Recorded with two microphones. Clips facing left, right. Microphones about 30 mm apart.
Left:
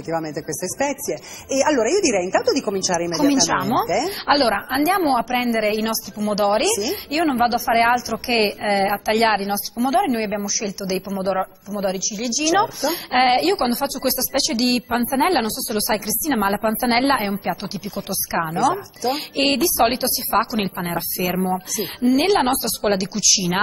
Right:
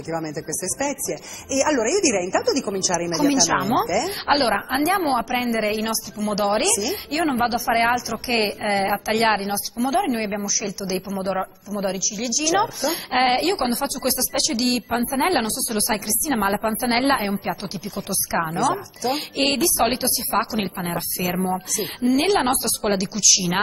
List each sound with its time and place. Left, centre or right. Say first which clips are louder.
0.1 s a woman's voice: left 3 dB; centre
0.5 s a woman's voice: left 4 dB; centre